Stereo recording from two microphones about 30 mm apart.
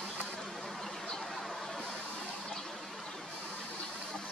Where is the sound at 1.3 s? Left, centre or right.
Centre.